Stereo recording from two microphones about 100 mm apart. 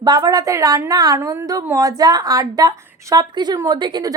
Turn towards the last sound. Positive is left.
turn(degrees=-45)  # may be behind; listen again after turning